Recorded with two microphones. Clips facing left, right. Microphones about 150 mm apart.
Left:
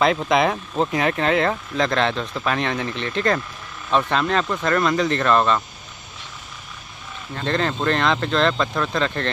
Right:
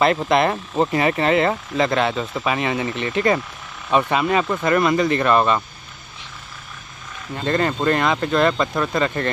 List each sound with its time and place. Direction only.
0.0 s speech: centre (ahead or behind)
7.3 s speech: 5° right (ahead or behind)